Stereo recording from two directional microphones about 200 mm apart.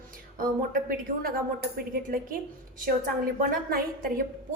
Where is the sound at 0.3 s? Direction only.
45° right (ahead or behind).